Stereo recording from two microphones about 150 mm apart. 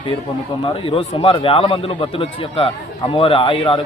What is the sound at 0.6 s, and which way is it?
Speech, 40° left (ahead or behind).